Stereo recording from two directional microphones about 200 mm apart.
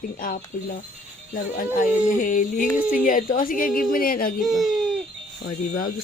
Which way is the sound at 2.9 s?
40° left (ahead or behind).